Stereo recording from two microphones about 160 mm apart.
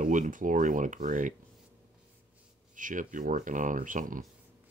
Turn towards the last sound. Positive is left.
turn(degrees=-55)  # may be behind; listen again after turning